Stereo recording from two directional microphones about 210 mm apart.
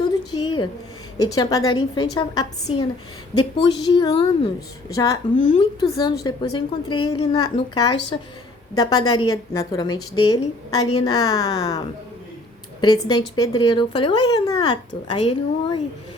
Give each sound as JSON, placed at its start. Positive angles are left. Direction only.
{"t": 0.3, "sound": "a sound", "side_deg": 20}
{"t": 1.2, "sound": "speech", "side_deg": 15}
{"t": 3.6, "sound": "a woman's voice", "side_deg": 25}
{"t": 5.4, "sound": "a woman's voice", "side_deg": 35}
{"t": 5.9, "sound": "a woman's voice", "side_deg": 20}
{"t": 12.8, "sound": "speech", "side_deg": 20}